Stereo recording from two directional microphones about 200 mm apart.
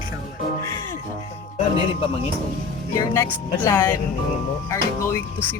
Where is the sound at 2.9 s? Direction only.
15° left (ahead or behind).